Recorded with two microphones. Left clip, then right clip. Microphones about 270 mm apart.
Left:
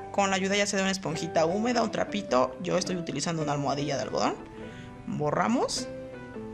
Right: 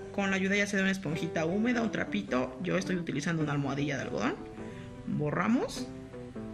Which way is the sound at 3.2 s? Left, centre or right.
Centre.